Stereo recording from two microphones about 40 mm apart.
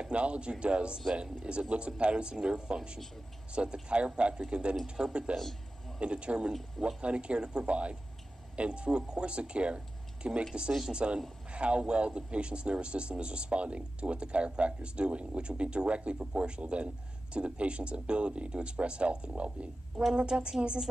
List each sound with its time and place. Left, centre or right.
0.0 s speech: right
4.8 s speech: centre
5.1 s speech: right